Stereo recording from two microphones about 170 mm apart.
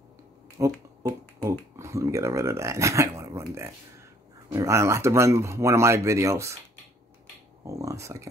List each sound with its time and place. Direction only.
0.6 s a sound: 20° right (ahead or behind)
1.0 s speech: 15° right (ahead or behind)
7.6 s speech: 20° right (ahead or behind)